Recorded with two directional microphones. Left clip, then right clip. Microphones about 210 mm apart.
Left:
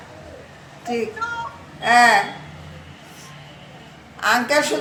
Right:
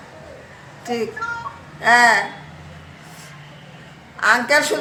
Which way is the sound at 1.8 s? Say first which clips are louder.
Right 1 dB; 40° right (ahead or behind).